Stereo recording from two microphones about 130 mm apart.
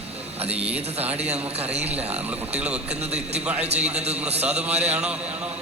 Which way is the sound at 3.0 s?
55° right (ahead or behind).